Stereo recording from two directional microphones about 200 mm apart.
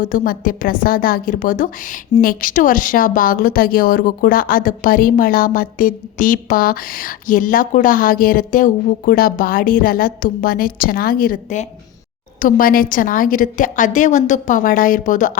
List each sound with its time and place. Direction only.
0.0 s a woman's voice: 45° left (ahead or behind)